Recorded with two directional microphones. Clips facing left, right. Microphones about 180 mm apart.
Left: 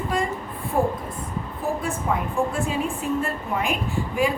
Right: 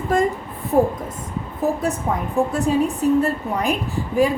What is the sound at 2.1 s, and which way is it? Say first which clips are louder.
A woman's voice: right 2 dB; 35° right (ahead or behind).